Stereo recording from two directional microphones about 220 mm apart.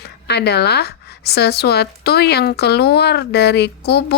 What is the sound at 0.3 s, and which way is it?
A woman's voice, 50° left (ahead or behind).